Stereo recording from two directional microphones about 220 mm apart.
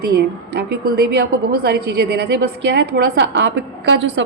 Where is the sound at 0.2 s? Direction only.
45° right (ahead or behind).